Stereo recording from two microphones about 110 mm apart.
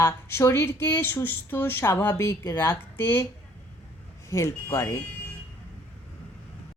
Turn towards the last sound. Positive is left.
turn(degrees=30)  # may be behind; listen again after turning